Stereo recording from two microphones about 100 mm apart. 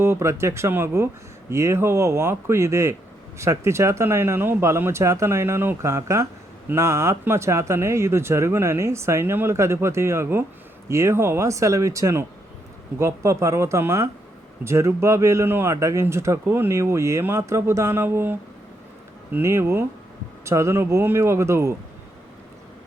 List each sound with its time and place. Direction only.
0.0 s speech: 25° right (ahead or behind)